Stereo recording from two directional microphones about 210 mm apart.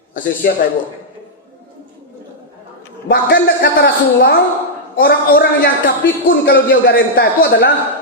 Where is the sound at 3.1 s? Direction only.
45° left (ahead or behind).